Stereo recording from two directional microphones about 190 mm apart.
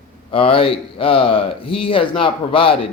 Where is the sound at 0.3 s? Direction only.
30° left (ahead or behind).